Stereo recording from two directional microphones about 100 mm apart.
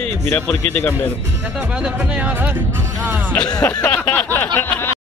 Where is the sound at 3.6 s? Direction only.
15° left (ahead or behind).